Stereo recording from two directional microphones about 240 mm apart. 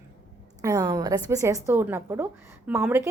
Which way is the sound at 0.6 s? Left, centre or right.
Centre.